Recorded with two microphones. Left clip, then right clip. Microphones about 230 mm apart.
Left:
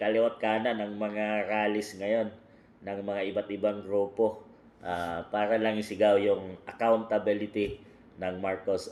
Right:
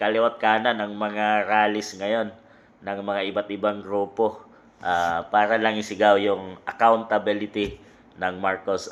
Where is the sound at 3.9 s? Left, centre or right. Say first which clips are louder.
Right 3 dB; right.